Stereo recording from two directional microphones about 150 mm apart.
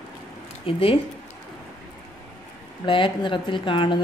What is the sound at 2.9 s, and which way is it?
A woman's voice, 35° left (ahead or behind).